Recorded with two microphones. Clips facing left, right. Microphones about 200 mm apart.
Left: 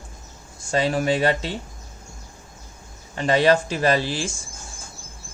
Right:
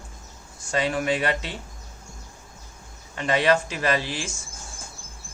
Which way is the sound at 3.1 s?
35° left (ahead or behind).